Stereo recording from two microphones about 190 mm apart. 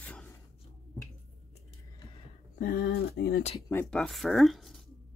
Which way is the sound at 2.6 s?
55° left (ahead or behind).